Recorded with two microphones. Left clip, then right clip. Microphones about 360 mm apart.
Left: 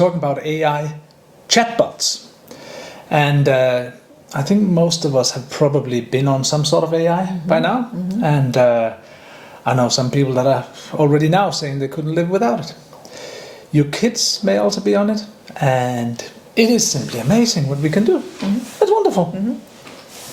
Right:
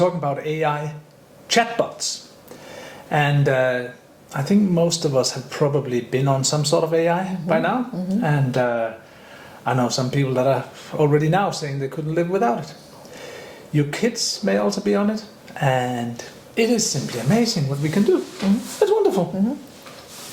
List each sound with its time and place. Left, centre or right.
0.0 s speech: left
13.7 s speech: left